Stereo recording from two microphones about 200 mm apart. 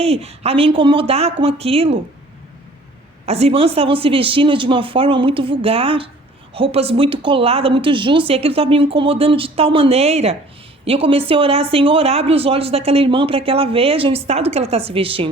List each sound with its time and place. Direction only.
0.0 s speech: 30° right (ahead or behind)
3.2 s speech: 30° right (ahead or behind)